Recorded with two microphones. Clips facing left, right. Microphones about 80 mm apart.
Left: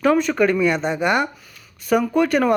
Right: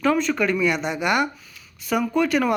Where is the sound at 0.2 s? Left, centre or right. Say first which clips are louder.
Left 4 dB; left.